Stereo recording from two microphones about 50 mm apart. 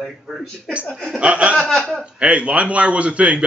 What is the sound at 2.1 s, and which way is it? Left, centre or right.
Speech, right.